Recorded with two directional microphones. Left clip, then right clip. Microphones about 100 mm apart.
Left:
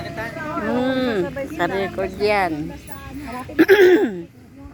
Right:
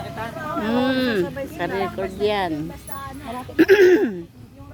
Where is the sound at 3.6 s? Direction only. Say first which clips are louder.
Left 1 dB; 40° right (ahead or behind).